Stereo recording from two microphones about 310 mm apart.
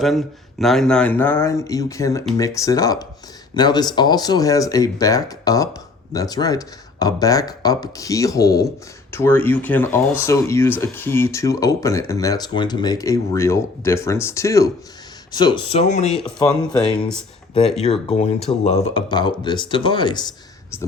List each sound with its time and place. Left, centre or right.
0.0 s speech: centre; by 16.0 s left
16.2 s speech: centre
17.9 s speech: centre